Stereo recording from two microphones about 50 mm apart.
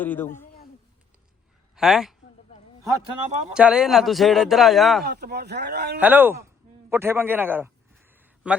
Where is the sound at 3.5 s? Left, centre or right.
Centre.